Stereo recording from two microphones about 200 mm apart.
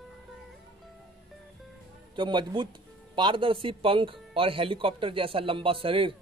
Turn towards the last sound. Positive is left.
turn(degrees=-25)  # may be behind; listen again after turning